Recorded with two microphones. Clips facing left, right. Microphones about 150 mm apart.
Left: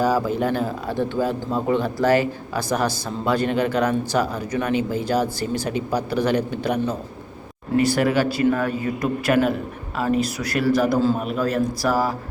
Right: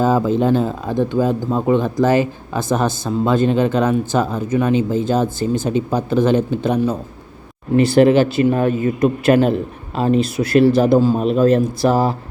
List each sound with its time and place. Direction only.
0.0 s speech: 25° right (ahead or behind)
7.8 s speech: 25° right (ahead or behind)